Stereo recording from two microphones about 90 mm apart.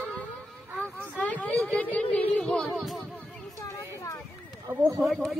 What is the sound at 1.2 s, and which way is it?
Speech, 15° left (ahead or behind).